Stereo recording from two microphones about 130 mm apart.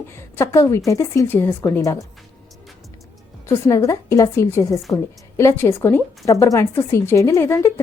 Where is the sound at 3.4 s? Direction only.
25° left (ahead or behind).